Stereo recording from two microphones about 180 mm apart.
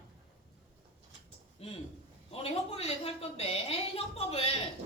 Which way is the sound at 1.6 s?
35° left (ahead or behind).